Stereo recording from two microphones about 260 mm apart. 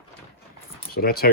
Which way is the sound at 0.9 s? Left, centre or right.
Left.